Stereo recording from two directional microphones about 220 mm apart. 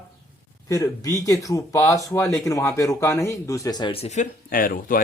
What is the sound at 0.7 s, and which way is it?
Speech, 15° left (ahead or behind).